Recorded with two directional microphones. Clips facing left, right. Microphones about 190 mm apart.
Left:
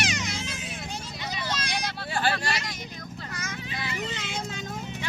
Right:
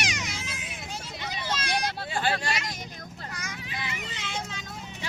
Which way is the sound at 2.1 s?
20° right (ahead or behind).